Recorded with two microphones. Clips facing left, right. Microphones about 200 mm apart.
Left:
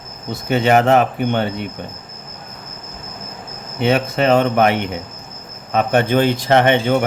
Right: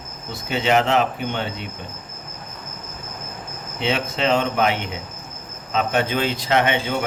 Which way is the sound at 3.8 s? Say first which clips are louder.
Left 7 dB; 50° left (ahead or behind).